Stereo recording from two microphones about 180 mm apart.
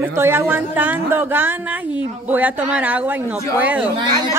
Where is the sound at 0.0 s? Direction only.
15° right (ahead or behind).